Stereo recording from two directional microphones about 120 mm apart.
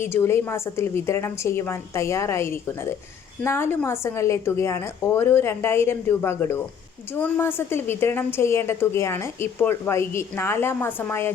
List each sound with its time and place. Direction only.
0.0 s a woman's voice: 20° left (ahead or behind)